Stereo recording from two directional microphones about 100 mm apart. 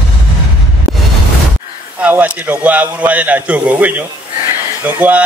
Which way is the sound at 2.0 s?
15° right (ahead or behind).